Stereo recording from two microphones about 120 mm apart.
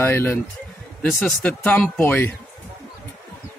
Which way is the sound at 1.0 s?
Centre (ahead or behind).